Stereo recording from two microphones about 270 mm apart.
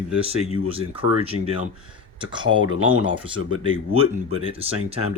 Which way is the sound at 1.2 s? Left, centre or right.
Right.